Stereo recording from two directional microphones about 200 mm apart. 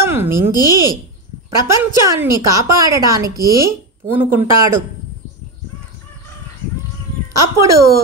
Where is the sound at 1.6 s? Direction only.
15° right (ahead or behind).